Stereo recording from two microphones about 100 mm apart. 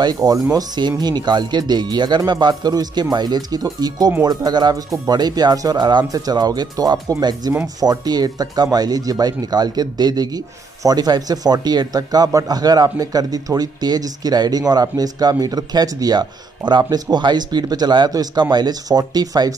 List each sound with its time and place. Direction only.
0.0 s a man's voice: 40° right (ahead or behind)